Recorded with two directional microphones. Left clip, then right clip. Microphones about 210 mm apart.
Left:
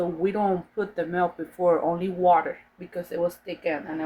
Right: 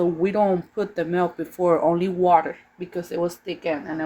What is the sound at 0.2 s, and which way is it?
Speech, 35° right (ahead or behind).